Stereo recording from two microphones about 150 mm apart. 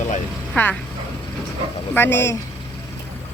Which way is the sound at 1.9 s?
15° left (ahead or behind).